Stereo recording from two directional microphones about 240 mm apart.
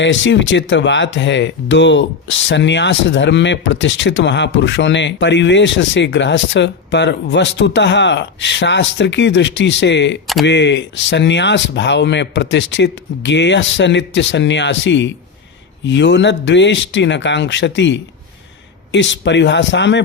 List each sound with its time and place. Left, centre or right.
0.0 s speech: left